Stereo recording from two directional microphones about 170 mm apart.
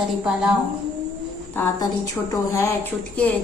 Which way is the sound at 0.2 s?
5° right (ahead or behind).